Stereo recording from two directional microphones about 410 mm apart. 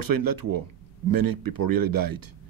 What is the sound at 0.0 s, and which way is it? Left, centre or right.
Speech, right.